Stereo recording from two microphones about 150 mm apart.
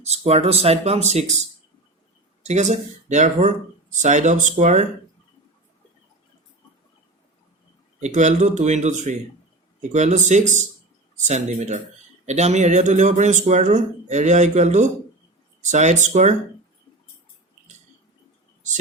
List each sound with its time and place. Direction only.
0.0 s speech: 45° right (ahead or behind)
2.4 s speech: 50° right (ahead or behind)
7.9 s speech: 50° right (ahead or behind)
18.6 s a sound: 55° right (ahead or behind)